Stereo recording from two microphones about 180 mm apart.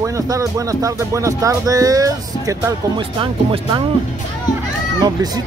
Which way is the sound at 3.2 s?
30° right (ahead or behind).